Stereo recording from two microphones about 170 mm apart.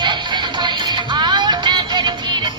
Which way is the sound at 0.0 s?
25° right (ahead or behind).